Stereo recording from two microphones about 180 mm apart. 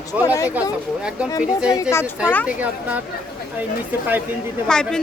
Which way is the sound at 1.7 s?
15° left (ahead or behind).